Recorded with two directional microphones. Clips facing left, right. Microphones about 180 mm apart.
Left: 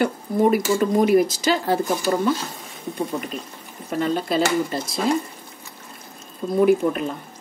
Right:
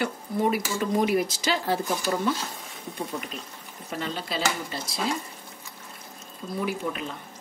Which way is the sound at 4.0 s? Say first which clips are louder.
Left 9 dB; 50° left (ahead or behind).